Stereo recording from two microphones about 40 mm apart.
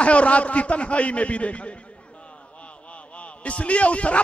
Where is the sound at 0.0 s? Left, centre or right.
Left.